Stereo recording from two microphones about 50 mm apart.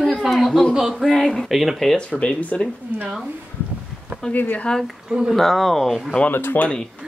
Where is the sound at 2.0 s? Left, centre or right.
Left.